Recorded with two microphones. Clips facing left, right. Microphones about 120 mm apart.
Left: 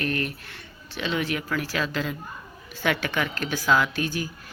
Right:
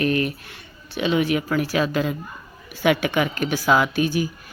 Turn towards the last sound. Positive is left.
turn(degrees=-15)  # may be behind; listen again after turning